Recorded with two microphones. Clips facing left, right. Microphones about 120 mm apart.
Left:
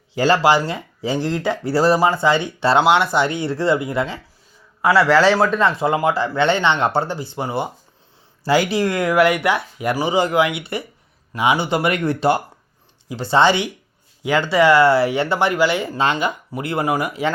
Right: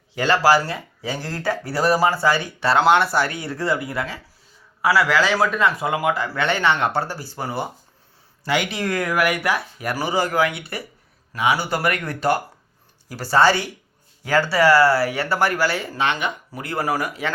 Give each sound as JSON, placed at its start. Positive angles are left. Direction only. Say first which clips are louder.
{"t": 0.2, "sound": "speech", "louder": "left 2 dB", "side_deg": 25}
{"t": 5.2, "sound": "speech", "louder": "left 4 dB", "side_deg": 30}
{"t": 8.4, "sound": "speech", "louder": "left 5 dB", "side_deg": 35}